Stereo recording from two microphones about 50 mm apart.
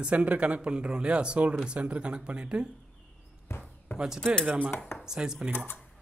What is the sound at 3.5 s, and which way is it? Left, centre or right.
Basketball bounce, left.